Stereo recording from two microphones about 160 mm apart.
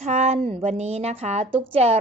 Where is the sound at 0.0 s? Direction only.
45° right (ahead or behind).